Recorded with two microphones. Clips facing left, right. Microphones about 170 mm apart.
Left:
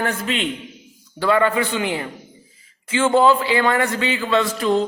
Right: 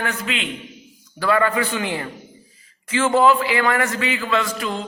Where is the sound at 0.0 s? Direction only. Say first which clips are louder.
Left 3 dB; 40° left (ahead or behind).